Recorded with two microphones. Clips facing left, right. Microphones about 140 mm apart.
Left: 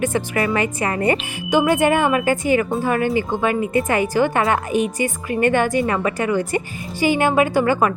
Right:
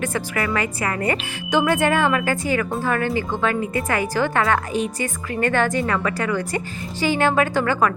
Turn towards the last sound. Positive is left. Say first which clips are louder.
# left 3 dB
turn(degrees=15)  # may be behind; listen again after turning